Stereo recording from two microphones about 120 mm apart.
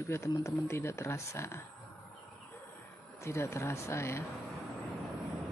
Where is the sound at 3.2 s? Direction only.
25° left (ahead or behind).